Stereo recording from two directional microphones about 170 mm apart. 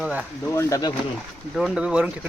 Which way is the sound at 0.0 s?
5° right (ahead or behind).